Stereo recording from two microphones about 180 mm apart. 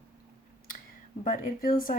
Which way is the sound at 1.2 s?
50° left (ahead or behind).